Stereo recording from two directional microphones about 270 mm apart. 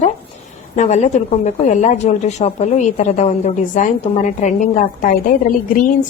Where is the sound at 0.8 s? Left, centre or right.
Left.